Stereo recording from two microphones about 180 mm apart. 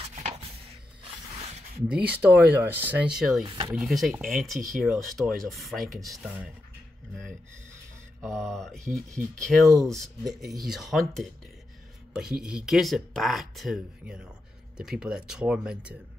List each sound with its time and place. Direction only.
0.1 s a sound: 40° right (ahead or behind)
1.9 s speech: 10° right (ahead or behind)
3.4 s speech: 25° right (ahead or behind)
3.7 s speech: centre (ahead or behind)
8.2 s speech: centre (ahead or behind)